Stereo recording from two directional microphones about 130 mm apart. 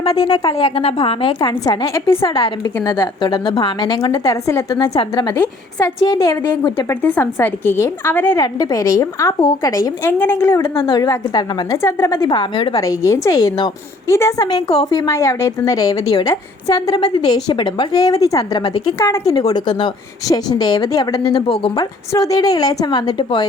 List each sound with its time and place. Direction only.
0.0 s a woman's voice: 35° left (ahead or behind)
1.6 s a woman's voice: 25° left (ahead or behind)
8.4 s a woman's voice: 30° left (ahead or behind)
10.8 s a woman's voice: 40° left (ahead or behind); by 12.3 s 20° left (ahead or behind)
12.3 s a woman's voice: 40° left (ahead or behind)
12.8 s a woman's voice: 25° left (ahead or behind)
18.6 s a woman's voice: 45° left (ahead or behind)
18.9 s a woman's voice: 25° left (ahead or behind); by 21.8 s 40° left (ahead or behind)
22.1 s a woman's voice: 25° left (ahead or behind)